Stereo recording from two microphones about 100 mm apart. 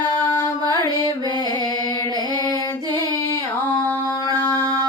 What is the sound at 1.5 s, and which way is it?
Music, 45° right (ahead or behind).